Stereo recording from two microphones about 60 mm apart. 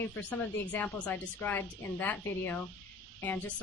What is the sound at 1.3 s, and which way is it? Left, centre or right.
A woman's voice, left.